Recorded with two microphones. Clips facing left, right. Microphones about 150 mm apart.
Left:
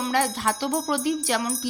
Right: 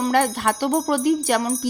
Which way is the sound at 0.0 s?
50° right (ahead or behind).